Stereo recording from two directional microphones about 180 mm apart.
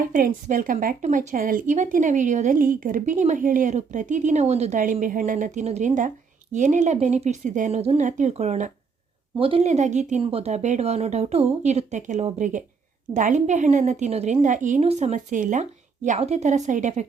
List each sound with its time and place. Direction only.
0.0 s speech: 50° right (ahead or behind)